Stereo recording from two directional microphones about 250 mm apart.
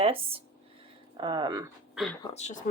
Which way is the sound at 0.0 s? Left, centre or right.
Right.